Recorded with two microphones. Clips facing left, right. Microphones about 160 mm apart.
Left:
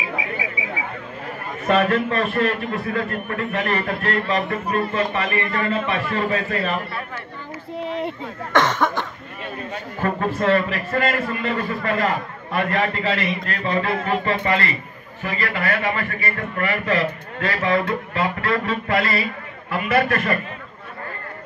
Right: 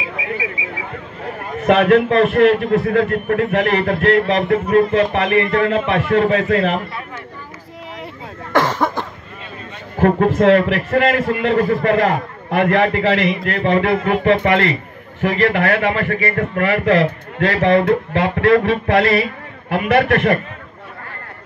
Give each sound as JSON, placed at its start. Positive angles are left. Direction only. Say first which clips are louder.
{"t": 1.7, "sound": "a man's voice", "louder": "right 6 dB", "side_deg": -75}
{"t": 8.5, "sound": "a sound", "louder": "right 2 dB", "side_deg": -10}
{"t": 9.9, "sound": "a man's voice", "louder": "right 9 dB", "side_deg": -75}